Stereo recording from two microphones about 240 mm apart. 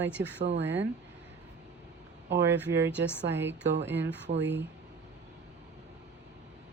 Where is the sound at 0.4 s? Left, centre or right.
Right.